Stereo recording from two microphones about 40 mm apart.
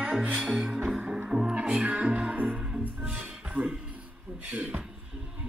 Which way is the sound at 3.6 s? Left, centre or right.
Right.